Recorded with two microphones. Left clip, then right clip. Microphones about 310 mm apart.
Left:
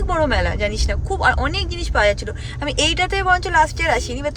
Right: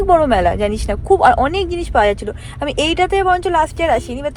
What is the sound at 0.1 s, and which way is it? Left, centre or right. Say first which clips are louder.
Speech: right 6 dB; centre.